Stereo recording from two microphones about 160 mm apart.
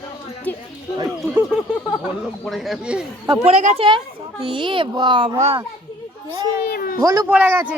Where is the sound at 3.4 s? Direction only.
40° right (ahead or behind).